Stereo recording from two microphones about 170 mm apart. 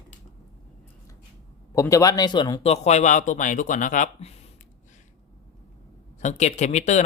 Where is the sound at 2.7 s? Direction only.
40° left (ahead or behind).